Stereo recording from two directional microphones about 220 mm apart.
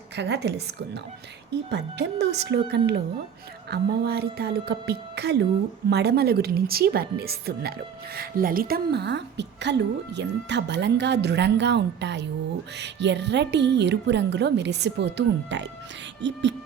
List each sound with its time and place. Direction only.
0.2 s a woman's voice: 50° right (ahead or behind)